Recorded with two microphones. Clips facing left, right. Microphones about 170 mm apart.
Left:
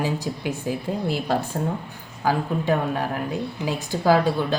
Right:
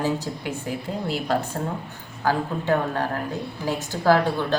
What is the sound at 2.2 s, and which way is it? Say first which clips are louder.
Speech: left 1 dB; 15° left (ahead or behind).